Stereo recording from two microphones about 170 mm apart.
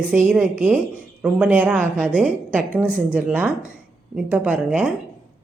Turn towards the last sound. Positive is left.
turn(degrees=-5)  # may be behind; listen again after turning